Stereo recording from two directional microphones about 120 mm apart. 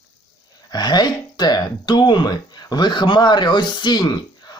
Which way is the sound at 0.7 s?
35° left (ahead or behind).